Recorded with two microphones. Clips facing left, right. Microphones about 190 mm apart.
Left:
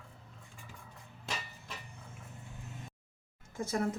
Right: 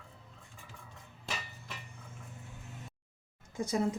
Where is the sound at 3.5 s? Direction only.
15° right (ahead or behind).